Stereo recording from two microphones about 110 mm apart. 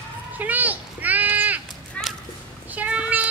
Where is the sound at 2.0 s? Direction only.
10° left (ahead or behind).